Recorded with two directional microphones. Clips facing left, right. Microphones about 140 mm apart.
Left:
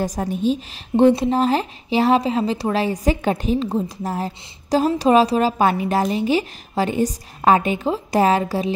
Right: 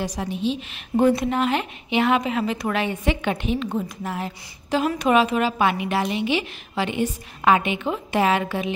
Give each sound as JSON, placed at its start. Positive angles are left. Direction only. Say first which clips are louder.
{"t": 0.0, "sound": "a woman's voice", "louder": "left 4 dB", "side_deg": 45}
{"t": 0.9, "sound": "speech", "louder": "left 4 dB", "side_deg": 30}